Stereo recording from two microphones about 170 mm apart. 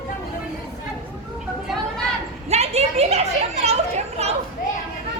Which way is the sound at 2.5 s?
40° right (ahead or behind).